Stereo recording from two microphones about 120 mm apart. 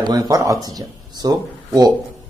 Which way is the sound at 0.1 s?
30° right (ahead or behind).